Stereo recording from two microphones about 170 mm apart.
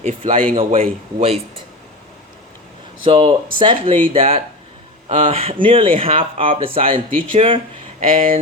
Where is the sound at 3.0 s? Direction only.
30° right (ahead or behind).